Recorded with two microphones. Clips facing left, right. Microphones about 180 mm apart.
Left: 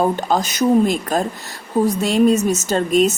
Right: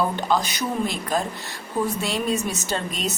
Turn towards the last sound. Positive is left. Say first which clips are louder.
# left 11 dB
turn(degrees=45)  # may be behind; listen again after turning